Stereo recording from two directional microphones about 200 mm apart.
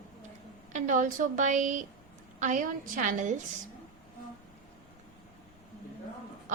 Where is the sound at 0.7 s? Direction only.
40° right (ahead or behind).